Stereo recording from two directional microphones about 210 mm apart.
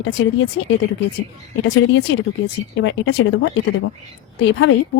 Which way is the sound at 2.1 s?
65° left (ahead or behind).